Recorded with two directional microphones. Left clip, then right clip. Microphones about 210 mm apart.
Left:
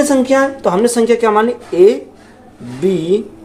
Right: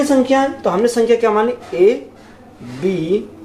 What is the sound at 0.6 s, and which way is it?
Speech, 50° left (ahead or behind).